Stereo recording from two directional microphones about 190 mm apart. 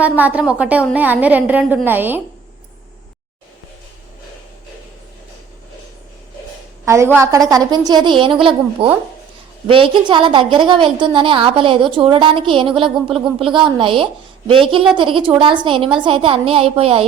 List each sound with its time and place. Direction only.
0.0 s a woman's voice: 10° right (ahead or behind)
6.8 s a woman's voice: 15° right (ahead or behind); by 17.1 s 30° right (ahead or behind)